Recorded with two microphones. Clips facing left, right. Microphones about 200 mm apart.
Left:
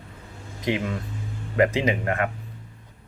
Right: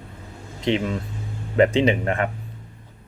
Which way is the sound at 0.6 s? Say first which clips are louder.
Right 3 dB; 25° right (ahead or behind).